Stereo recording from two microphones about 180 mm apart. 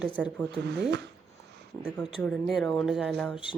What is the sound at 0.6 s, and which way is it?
Speech, 70° right (ahead or behind).